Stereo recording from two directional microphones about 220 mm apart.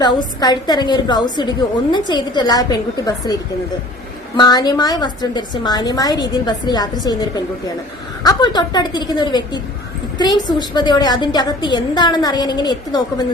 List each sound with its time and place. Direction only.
0.0 s a woman's voice: 20° left (ahead or behind)
4.4 s a woman's voice: 20° left (ahead or behind)